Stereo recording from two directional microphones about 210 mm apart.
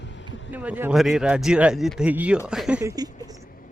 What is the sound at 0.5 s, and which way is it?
Speech, 10° right (ahead or behind).